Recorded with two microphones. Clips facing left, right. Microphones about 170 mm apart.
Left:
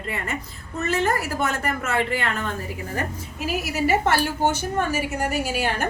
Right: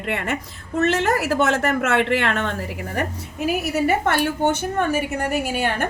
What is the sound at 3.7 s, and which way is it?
A woman's voice, 55° right (ahead or behind).